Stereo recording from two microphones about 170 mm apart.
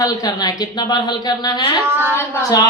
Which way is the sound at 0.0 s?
20° left (ahead or behind).